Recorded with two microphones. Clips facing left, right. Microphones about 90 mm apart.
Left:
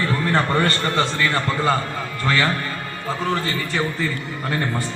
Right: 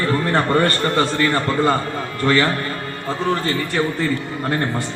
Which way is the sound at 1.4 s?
Centre (ahead or behind).